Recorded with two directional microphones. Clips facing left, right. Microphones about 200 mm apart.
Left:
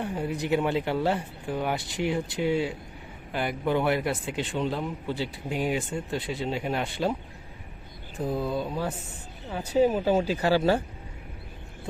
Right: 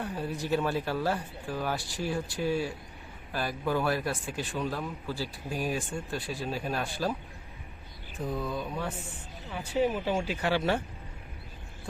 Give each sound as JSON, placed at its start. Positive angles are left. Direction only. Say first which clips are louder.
{"t": 0.0, "sound": "speech", "louder": "left 4 dB", "side_deg": 15}
{"t": 8.2, "sound": "speech", "louder": "left 5 dB", "side_deg": 30}